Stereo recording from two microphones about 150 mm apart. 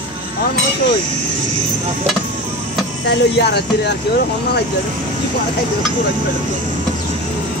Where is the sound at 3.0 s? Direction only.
90° left.